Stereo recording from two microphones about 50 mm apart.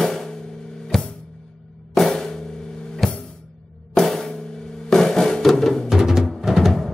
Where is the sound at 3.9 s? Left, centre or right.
Centre.